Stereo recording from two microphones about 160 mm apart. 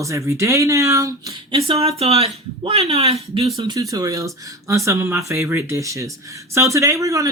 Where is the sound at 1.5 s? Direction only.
40° right (ahead or behind).